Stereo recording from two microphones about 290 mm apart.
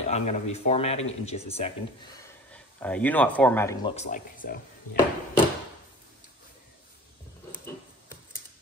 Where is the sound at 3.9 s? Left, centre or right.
Left.